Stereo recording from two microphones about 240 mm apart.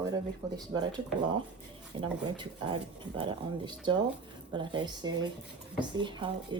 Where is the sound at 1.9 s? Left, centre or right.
Right.